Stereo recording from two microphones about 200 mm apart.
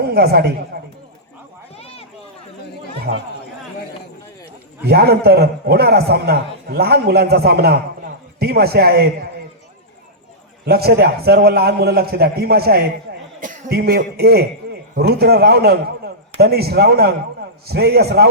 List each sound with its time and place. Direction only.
0.0 s a woman's voice: 50° right (ahead or behind)
1.7 s a sound: 30° left (ahead or behind)
3.1 s speech: 60° right (ahead or behind)
4.9 s a man's voice: 50° right (ahead or behind)
10.7 s a man's voice: 50° right (ahead or behind)
13.4 s a man's voice: 40° right (ahead or behind)